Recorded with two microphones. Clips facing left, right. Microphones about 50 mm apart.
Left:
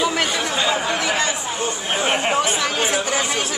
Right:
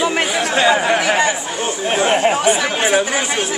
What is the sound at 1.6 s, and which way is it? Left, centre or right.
Chatter, right.